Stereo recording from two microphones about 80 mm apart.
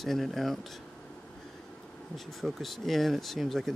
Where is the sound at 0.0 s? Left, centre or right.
Centre.